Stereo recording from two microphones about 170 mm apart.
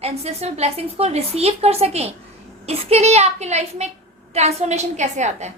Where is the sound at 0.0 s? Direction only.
40° right (ahead or behind).